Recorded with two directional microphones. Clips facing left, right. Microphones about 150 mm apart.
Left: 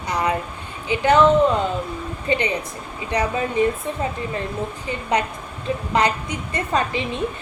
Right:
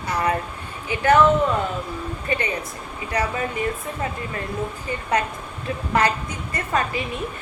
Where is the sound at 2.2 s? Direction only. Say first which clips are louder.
Left 4 dB; 20° left (ahead or behind).